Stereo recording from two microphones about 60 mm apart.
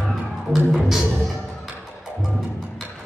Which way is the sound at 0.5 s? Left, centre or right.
Centre.